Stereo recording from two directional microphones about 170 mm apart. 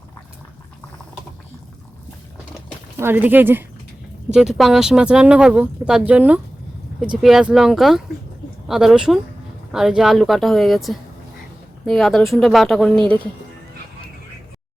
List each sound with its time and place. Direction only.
3.0 s speech: 10° right (ahead or behind)